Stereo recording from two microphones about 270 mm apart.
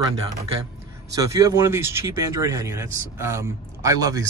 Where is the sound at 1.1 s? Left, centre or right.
Centre.